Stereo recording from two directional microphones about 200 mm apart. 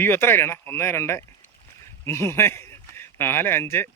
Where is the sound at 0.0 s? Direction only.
10° left (ahead or behind).